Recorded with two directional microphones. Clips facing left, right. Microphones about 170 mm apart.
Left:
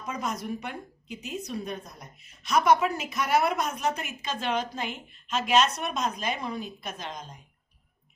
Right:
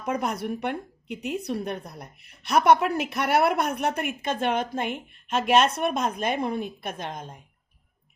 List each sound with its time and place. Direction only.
0.0 s a woman's voice: 60° right (ahead or behind)